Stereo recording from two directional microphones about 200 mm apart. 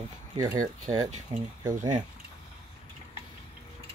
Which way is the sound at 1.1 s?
35° right (ahead or behind).